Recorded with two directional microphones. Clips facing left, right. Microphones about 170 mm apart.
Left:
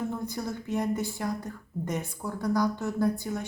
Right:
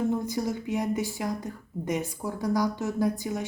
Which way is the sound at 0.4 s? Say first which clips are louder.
Right 2 dB; 15° right (ahead or behind).